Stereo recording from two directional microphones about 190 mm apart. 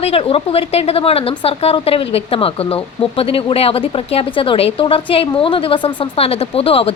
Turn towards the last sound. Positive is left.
turn(degrees=30)  # may be behind; listen again after turning